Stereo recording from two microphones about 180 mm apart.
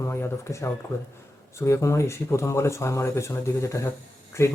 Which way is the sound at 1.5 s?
15° left (ahead or behind).